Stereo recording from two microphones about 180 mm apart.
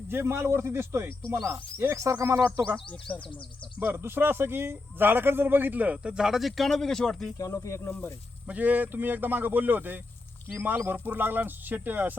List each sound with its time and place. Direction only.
0.1 s speech: 10° right (ahead or behind)
3.1 s speech: 10° left (ahead or behind)
3.8 s speech: 10° right (ahead or behind)
7.3 s speech: 20° left (ahead or behind)
8.4 s speech: 10° right (ahead or behind)